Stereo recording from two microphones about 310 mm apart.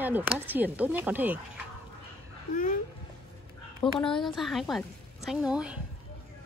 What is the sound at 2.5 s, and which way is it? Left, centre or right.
Speech, left.